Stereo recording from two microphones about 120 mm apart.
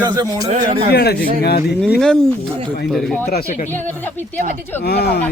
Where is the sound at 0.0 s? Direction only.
35° right (ahead or behind).